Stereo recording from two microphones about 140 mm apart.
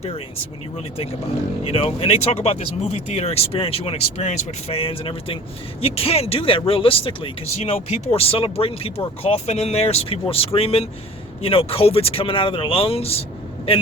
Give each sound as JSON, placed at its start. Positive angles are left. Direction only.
{"t": 1.6, "sound": "speech", "side_deg": 45}